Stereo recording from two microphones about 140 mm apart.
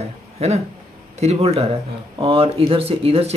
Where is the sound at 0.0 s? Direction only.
50° right (ahead or behind).